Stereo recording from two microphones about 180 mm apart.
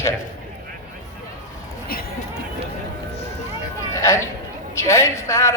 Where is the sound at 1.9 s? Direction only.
55° left (ahead or behind).